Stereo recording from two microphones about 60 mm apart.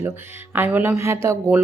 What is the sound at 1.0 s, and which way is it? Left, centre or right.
Speech, right.